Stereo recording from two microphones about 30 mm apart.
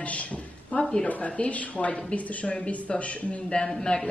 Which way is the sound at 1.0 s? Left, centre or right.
Left.